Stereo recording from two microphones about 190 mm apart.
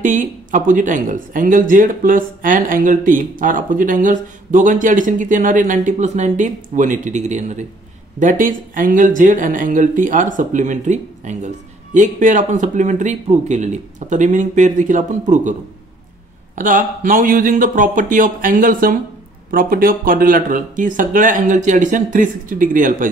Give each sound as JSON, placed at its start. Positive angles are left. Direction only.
{"t": 0.0, "sound": "speech", "side_deg": -45}
{"t": 16.5, "sound": "speech", "side_deg": -45}